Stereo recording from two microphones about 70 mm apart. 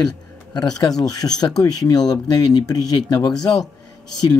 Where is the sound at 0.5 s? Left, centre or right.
Left.